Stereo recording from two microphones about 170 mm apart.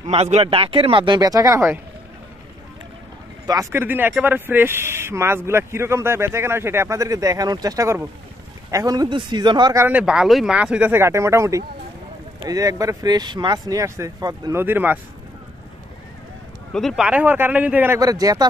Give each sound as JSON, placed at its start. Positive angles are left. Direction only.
{"t": 0.0, "sound": "speech", "side_deg": -40}
{"t": 3.4, "sound": "speech", "side_deg": -15}
{"t": 9.8, "sound": "speech", "side_deg": -5}
{"t": 16.7, "sound": "speech", "side_deg": 0}